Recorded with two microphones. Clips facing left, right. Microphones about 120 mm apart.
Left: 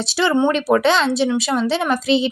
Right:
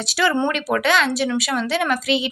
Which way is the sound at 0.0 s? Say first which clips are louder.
Left 3 dB; 25° left (ahead or behind).